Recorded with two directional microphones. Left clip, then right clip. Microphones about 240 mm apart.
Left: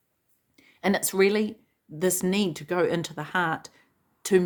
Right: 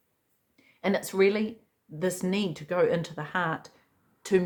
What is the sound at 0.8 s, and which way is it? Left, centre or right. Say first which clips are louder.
Speech: left 2 dB; left.